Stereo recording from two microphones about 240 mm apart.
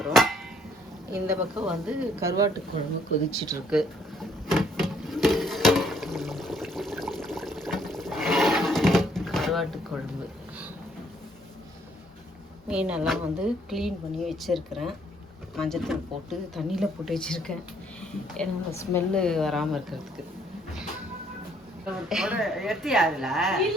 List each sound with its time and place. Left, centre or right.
0.0 s a sound: centre
1.1 s a woman's voice: centre
3.7 s drawer open or close: centre
12.6 s speech: centre
22.1 s speech: centre